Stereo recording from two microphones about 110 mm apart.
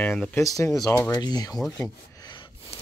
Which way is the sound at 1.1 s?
40° left (ahead or behind).